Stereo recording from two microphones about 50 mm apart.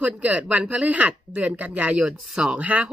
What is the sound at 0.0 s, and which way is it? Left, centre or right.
Speech, right.